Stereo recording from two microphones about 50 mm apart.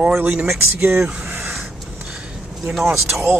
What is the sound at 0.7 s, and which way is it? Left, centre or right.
Speech, right.